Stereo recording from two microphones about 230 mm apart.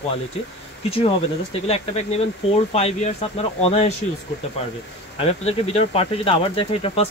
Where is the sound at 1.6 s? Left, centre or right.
Left.